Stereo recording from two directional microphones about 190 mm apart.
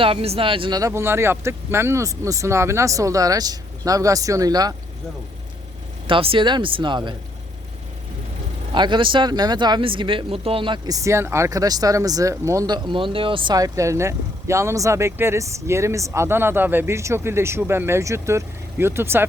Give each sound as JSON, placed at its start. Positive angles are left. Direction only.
{"t": 0.0, "sound": "speech", "side_deg": -30}
{"t": 6.1, "sound": "speech", "side_deg": -30}
{"t": 8.7, "sound": "speech", "side_deg": -25}